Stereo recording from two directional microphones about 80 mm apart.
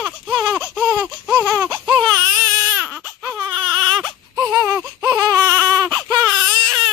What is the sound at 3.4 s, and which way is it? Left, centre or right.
Baby cry, right.